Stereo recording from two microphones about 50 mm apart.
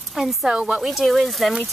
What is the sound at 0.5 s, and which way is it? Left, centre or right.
Speech, centre.